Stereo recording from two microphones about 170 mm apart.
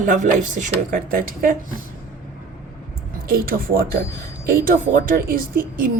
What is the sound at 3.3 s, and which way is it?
Speech, 60° right (ahead or behind).